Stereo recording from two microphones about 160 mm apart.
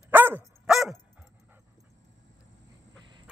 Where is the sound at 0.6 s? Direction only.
Centre (ahead or behind).